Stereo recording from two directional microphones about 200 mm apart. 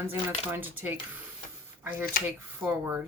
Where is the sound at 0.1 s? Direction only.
10° right (ahead or behind).